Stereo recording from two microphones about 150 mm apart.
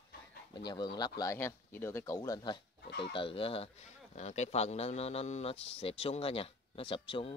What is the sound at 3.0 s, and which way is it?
Speech, 35° left (ahead or behind).